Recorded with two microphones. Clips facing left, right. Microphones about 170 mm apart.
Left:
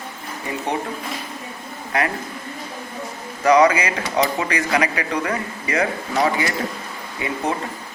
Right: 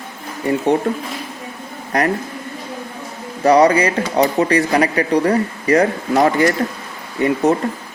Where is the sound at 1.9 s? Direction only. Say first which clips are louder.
Right 4 dB; 40° right (ahead or behind).